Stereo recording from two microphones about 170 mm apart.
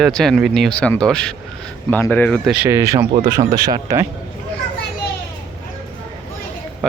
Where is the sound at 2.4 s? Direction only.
5° right (ahead or behind).